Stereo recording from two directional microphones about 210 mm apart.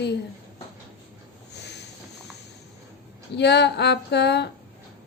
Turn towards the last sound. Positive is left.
turn(degrees=55)  # may be behind; listen again after turning